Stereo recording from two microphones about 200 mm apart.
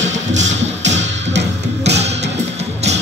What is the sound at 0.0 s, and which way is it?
Music, 35° right (ahead or behind).